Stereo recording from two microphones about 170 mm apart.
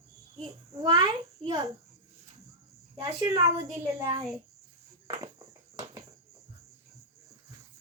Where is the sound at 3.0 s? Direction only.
20° right (ahead or behind).